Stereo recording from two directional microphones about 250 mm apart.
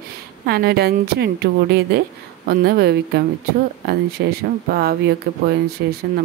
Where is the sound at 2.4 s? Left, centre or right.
Right.